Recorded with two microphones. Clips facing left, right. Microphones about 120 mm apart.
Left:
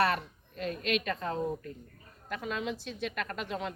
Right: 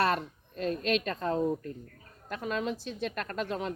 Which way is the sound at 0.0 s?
40° right (ahead or behind).